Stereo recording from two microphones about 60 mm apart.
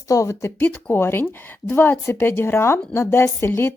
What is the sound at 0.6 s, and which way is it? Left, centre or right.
Speech, left.